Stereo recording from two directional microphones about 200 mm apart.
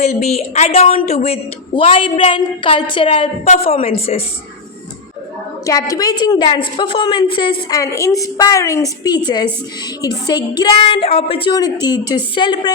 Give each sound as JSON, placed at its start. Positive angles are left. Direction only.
{"t": 0.0, "sound": "a woman's voice", "side_deg": 35}
{"t": 5.6, "sound": "a woman's voice", "side_deg": 15}